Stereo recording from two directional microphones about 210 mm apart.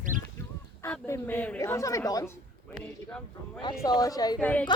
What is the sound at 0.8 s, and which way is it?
A woman's voice, 10° left (ahead or behind).